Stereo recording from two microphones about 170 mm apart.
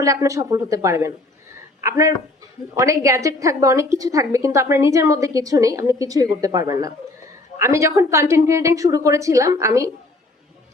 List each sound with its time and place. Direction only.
0.0 s a woman's voice: 20° right (ahead or behind)